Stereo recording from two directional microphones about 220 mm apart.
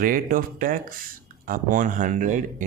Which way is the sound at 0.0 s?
40° right (ahead or behind).